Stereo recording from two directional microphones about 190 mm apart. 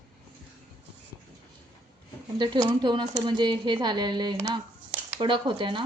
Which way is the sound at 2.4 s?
25° right (ahead or behind).